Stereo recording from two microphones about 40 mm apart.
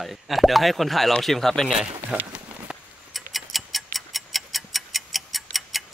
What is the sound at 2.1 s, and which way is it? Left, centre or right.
Speech, right.